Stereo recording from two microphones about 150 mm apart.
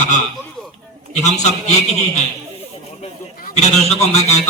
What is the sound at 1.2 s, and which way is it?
Speech, 50° left (ahead or behind).